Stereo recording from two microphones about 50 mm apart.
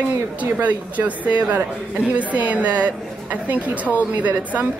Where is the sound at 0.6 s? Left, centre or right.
Right.